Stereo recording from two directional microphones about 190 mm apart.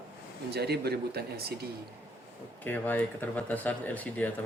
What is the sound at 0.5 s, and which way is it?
Speech, 60° right (ahead or behind).